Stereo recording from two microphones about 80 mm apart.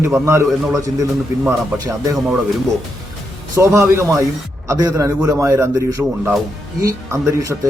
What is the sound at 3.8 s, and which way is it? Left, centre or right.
Speech, right.